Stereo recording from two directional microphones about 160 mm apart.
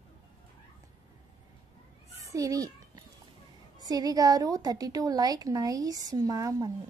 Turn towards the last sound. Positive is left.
turn(degrees=-20)  # may be behind; listen again after turning